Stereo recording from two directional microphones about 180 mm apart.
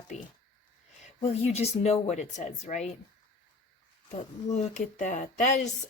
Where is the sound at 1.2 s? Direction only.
35° left (ahead or behind).